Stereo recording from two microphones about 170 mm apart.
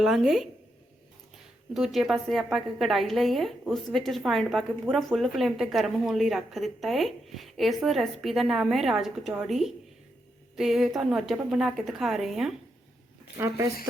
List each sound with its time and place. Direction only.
0.0 s a woman's voice: centre (ahead or behind)
1.7 s a woman's voice: centre (ahead or behind)
13.4 s speech: 15° right (ahead or behind)